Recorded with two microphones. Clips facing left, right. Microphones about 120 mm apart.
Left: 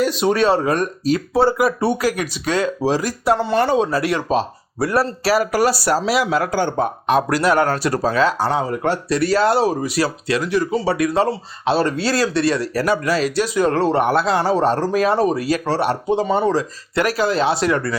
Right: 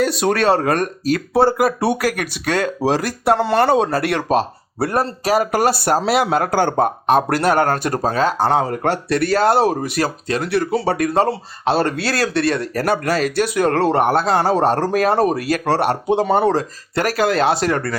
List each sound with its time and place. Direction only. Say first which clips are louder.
0.0 s speech: even; 60° right (ahead or behind)
5.2 s speech: right 2 dB; 20° right (ahead or behind)
5.5 s speech: right 1 dB; 50° right (ahead or behind)
7.1 s speech: even; 55° right (ahead or behind)
10.5 s speech: right 2 dB; 65° right (ahead or behind)
10.9 s speech: right 1 dB; 50° right (ahead or behind)
16.9 s speech: right 1 dB; 45° right (ahead or behind)